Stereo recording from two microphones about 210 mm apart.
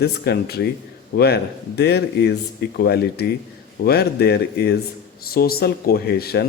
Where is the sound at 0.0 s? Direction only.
50° left (ahead or behind).